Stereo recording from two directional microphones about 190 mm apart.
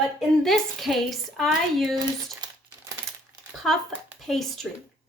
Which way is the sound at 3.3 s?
20° right (ahead or behind).